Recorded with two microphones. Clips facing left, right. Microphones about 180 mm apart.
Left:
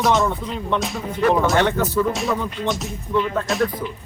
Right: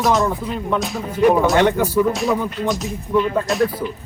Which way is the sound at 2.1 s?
Centre (ahead or behind).